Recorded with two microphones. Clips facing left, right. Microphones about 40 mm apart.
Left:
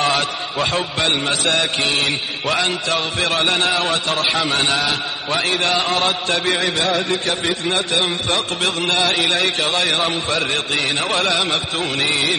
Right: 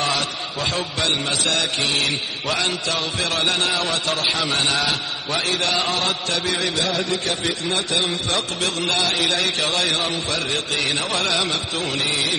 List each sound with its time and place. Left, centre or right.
0.0 s a man's voice: left
4.3 s a man's voice: centre
5.4 s speech: left